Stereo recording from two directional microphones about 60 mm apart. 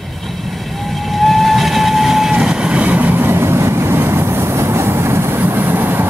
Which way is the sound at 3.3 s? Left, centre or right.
Right.